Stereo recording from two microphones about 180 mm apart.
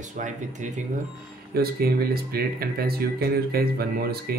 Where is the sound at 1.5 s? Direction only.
60° right (ahead or behind).